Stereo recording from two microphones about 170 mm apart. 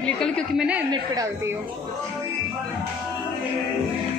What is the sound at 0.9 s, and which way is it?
Speech, 20° right (ahead or behind).